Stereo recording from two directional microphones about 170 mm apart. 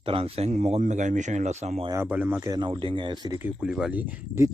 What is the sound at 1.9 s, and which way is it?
Speech, 15° right (ahead or behind).